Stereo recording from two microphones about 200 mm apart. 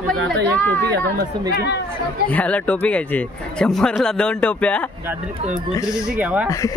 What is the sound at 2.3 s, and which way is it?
A man's voice, 5° left (ahead or behind).